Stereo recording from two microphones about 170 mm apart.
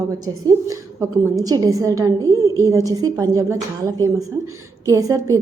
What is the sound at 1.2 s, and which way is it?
A woman's voice, 20° right (ahead or behind).